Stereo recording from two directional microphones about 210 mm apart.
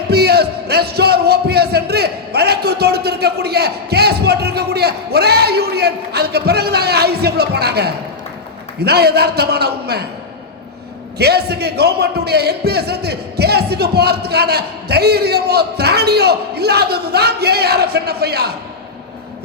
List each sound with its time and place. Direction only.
0.1 s speech: 50° right (ahead or behind)
11.2 s speech: 50° right (ahead or behind)